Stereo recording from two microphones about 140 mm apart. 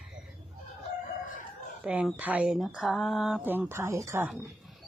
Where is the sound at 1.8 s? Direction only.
10° right (ahead or behind).